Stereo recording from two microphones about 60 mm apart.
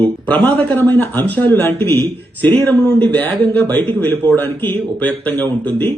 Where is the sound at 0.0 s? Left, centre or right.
Left.